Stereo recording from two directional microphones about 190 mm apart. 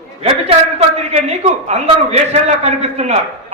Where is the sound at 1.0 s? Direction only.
35° right (ahead or behind).